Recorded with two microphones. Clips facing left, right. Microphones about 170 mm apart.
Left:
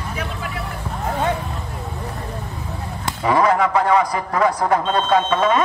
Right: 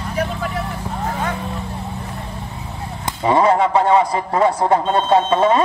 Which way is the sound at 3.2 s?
25° right (ahead or behind).